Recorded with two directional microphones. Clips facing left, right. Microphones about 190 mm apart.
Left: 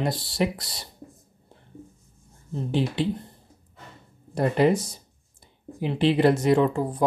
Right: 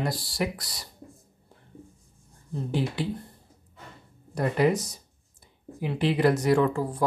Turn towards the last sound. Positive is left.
turn(degrees=20)  # may be behind; listen again after turning